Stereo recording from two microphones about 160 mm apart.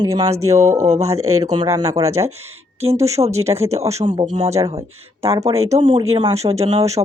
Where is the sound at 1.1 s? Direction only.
25° right (ahead or behind).